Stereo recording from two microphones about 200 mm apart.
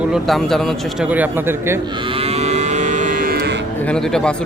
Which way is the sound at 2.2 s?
30° right (ahead or behind).